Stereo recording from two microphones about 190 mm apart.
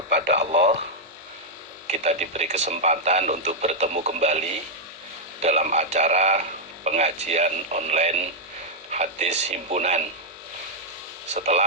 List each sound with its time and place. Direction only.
0.1 s a sound: 60° right (ahead or behind)
1.9 s speech: 35° right (ahead or behind)
11.3 s speech: 35° right (ahead or behind)